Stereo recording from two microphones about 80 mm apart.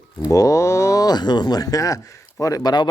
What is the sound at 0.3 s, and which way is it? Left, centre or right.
Speech, left.